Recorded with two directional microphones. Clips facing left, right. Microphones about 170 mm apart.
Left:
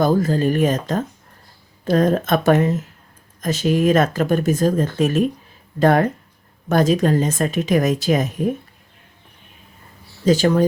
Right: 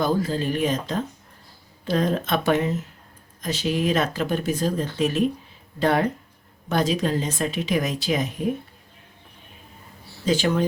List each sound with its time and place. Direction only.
0.0 s speech: 45° left (ahead or behind)
10.2 s speech: 40° left (ahead or behind)